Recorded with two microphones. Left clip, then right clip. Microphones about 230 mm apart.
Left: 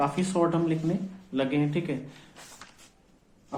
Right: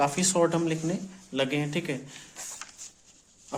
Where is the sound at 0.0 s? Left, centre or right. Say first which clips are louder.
Right 2 dB; right.